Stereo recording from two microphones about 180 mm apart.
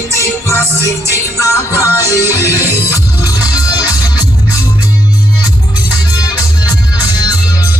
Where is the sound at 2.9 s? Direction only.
20° left (ahead or behind).